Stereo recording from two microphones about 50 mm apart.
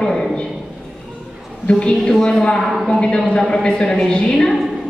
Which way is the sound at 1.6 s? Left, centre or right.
Left.